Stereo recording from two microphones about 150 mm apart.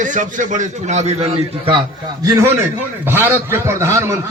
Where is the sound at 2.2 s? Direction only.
20° right (ahead or behind).